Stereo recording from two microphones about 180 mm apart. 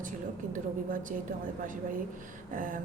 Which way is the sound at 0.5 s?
50° right (ahead or behind).